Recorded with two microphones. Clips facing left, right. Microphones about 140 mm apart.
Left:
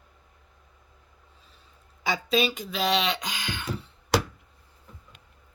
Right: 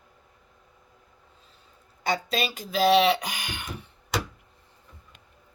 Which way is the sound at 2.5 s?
40° right (ahead or behind).